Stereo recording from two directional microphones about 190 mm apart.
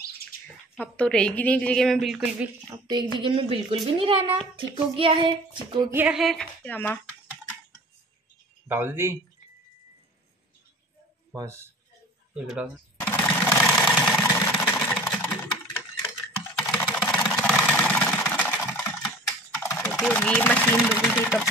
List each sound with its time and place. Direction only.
0.7 s a woman's voice: 5° left (ahead or behind)
2.7 s speech: 20° right (ahead or behind)
5.9 s a woman's voice: 5° right (ahead or behind)
8.6 s speech: 10° right (ahead or behind)
11.3 s speech: 15° right (ahead or behind)
12.4 s a woman's voice: 5° right (ahead or behind)
13.0 s sewing machine: 10° left (ahead or behind)
13.7 s engine: centre (ahead or behind)
14.3 s engine: 10° left (ahead or behind)
14.7 s engine: centre (ahead or behind)
16.7 s engine: 5° left (ahead or behind)
19.6 s typing: 10° left (ahead or behind)
20.0 s a woman's voice: 5° left (ahead or behind)